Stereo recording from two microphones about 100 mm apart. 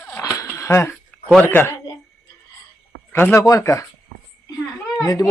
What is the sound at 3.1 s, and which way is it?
Speech, 20° left (ahead or behind).